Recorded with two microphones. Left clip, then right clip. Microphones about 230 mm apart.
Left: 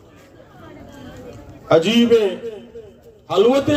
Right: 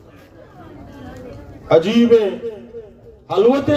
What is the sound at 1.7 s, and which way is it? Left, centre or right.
A man's voice, left.